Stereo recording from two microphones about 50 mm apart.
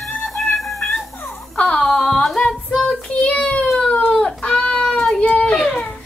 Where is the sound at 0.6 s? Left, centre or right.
Centre.